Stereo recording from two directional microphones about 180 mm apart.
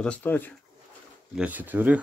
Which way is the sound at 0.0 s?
10° left (ahead or behind).